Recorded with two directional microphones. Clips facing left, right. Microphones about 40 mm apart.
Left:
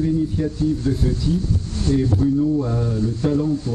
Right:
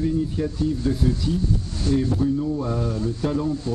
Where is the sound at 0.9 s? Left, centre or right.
Centre.